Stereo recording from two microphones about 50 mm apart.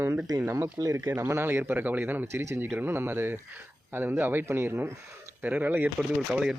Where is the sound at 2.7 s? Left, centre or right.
Right.